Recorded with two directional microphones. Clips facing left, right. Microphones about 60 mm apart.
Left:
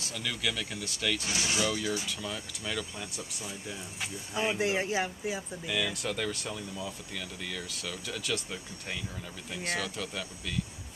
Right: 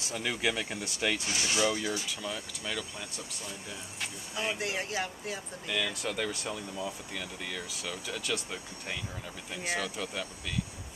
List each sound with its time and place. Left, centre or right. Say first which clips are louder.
0.0 s speech: right 3 dB; right
1.2 s speech: even; centre
1.6 s speech: right 3 dB; centre
4.0 s speech: left 3 dB; centre
5.7 s speech: even; centre